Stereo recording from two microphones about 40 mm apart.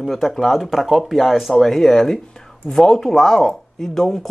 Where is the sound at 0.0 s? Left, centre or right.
Centre.